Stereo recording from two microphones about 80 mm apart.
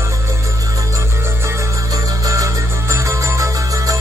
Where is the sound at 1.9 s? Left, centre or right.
Right.